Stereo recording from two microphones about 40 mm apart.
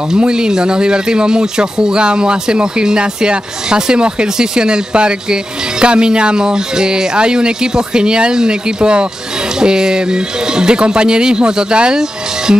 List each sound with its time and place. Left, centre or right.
0.2 s speech: right